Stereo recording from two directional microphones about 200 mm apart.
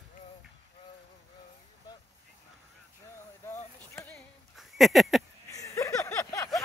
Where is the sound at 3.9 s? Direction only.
10° left (ahead or behind).